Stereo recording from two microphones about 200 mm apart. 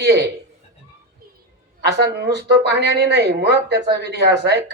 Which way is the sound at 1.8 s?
55° right (ahead or behind).